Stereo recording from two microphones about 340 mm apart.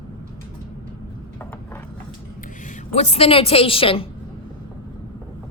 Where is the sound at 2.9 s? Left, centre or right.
Centre.